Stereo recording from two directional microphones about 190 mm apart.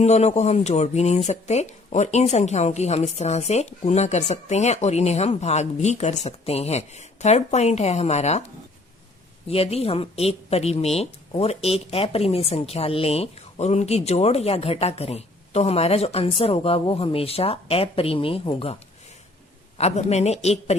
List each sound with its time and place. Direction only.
0.0 s speech: 35° left (ahead or behind)
9.5 s speech: 30° left (ahead or behind)
19.8 s speech: 35° left (ahead or behind)